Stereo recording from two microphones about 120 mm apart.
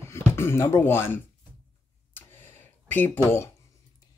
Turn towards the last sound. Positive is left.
turn(degrees=20)  # may be behind; listen again after turning